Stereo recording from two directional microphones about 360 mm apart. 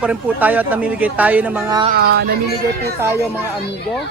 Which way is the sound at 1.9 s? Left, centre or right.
Right.